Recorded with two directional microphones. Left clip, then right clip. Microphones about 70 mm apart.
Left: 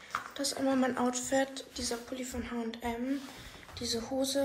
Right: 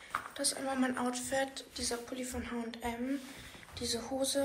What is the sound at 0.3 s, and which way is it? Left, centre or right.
Speech, left.